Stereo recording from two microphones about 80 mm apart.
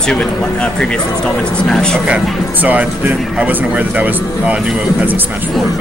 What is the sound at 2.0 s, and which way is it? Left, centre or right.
Speech, centre.